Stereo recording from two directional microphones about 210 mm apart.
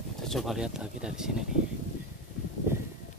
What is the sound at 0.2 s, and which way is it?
Speech, centre (ahead or behind).